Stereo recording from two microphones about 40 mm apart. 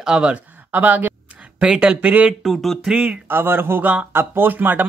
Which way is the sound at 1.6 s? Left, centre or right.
Right.